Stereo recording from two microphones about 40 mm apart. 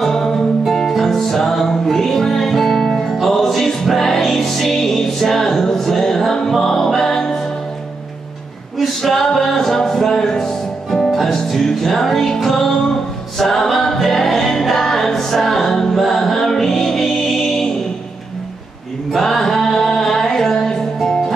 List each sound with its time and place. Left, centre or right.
0.0 s music: centre
8.7 s music: centre
19.1 s music: centre